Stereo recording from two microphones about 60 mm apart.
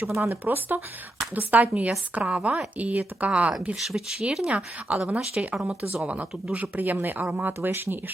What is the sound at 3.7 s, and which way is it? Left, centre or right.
Speech, centre.